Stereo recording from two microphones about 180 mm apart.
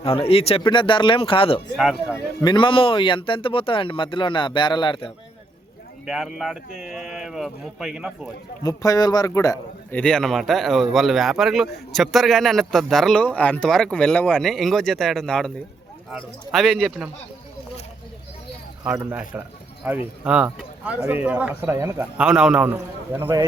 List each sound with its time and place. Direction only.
0.0 s speech: 30° left (ahead or behind)
1.7 s speech: centre (ahead or behind)
2.4 s speech: 25° left (ahead or behind)
6.1 s speech: centre (ahead or behind)
8.6 s speech: 20° left (ahead or behind)
10.0 s speech: 5° left (ahead or behind)
18.9 s a man's voice: 10° right (ahead or behind)